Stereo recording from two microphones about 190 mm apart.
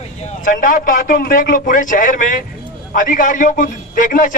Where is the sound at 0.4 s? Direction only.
45° left (ahead or behind).